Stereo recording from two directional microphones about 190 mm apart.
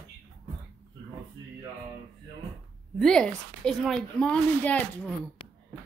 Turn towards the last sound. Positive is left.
turn(degrees=5)  # may be behind; listen again after turning